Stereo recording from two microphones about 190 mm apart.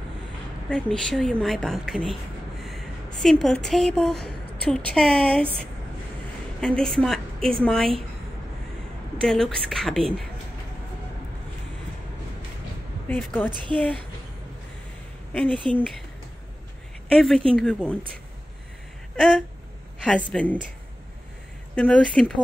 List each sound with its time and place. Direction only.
0.7 s a woman's voice: 5° left (ahead or behind)
3.2 s a woman's voice: centre (ahead or behind)
6.6 s a woman's voice: 5° left (ahead or behind)
9.2 s a woman's voice: 5° left (ahead or behind)
13.1 s a woman's voice: 10° left (ahead or behind)
15.3 s a woman's voice: 5° left (ahead or behind)
17.1 s a woman's voice: centre (ahead or behind)
20.1 s a woman's voice: 5° left (ahead or behind)
21.7 s a woman's voice: 5° left (ahead or behind)